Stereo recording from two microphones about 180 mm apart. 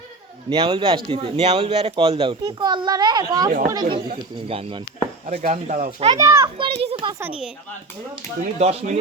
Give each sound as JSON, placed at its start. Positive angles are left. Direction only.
{"t": 0.5, "sound": "speech", "side_deg": -30}
{"t": 5.2, "sound": "speech", "side_deg": -45}
{"t": 6.1, "sound": "a child's voice", "side_deg": -15}
{"t": 6.8, "sound": "speech", "side_deg": -25}
{"t": 7.2, "sound": "a child's voice", "side_deg": -5}
{"t": 8.4, "sound": "speech", "side_deg": -35}